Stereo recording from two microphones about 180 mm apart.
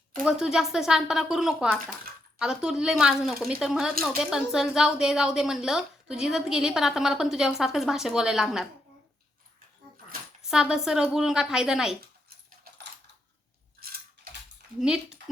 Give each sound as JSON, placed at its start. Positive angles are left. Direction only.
{"t": 0.3, "sound": "a woman's voice", "side_deg": -5}
{"t": 10.4, "sound": "a woman's voice", "side_deg": -5}
{"t": 13.8, "sound": "mechanisms", "side_deg": -55}
{"t": 14.8, "sound": "a woman's voice", "side_deg": -5}